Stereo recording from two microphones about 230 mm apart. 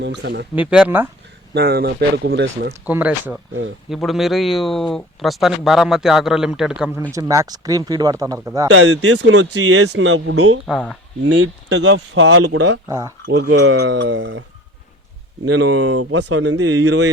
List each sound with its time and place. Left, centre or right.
0.0 s speech: right
0.5 s speech: centre
1.5 s speech: right
2.8 s speech: centre
7.1 s speech: centre
8.7 s speech: right
9.9 s speech: right
10.7 s speech: centre
11.2 s speech: right
12.9 s speech: centre
13.2 s speech: right
15.4 s speech: right
16.6 s speech: right